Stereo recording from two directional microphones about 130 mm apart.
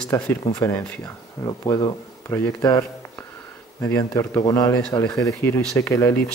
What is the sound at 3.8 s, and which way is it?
Speech, 15° left (ahead or behind).